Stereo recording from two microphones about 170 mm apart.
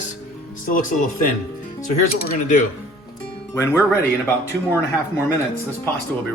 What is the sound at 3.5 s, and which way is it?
Speech, 15° left (ahead or behind).